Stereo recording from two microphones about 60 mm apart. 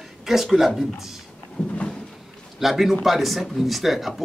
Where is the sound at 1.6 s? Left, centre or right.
Centre.